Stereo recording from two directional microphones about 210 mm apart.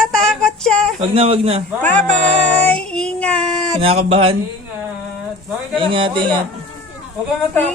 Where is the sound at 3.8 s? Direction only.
30° right (ahead or behind).